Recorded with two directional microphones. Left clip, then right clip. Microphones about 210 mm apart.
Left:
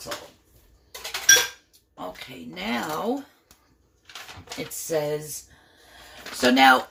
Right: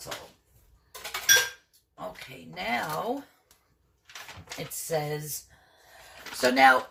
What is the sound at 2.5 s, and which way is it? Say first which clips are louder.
Speech: even; 45° left (ahead or behind).